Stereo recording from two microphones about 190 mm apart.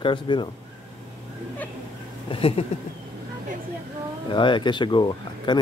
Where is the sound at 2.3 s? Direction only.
30° left (ahead or behind).